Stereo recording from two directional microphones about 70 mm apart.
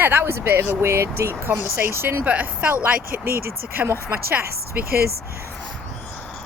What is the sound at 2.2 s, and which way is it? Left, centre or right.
Speech, centre.